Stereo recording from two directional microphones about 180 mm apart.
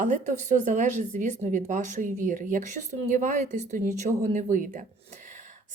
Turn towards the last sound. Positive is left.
turn(degrees=-45)  # may be behind; listen again after turning